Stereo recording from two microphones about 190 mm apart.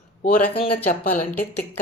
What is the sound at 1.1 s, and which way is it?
Speech, 10° left (ahead or behind).